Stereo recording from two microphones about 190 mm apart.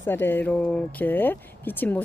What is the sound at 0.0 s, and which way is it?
Speech, 10° left (ahead or behind).